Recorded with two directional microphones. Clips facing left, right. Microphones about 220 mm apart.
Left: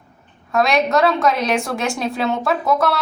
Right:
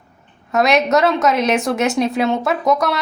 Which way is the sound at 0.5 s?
20° right (ahead or behind).